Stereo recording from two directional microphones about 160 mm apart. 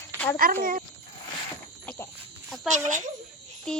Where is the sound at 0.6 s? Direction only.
60° right (ahead or behind).